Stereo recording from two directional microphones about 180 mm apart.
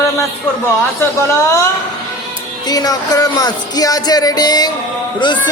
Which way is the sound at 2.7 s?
20° left (ahead or behind).